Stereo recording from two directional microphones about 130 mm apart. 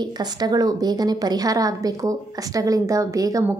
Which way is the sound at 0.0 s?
30° right (ahead or behind).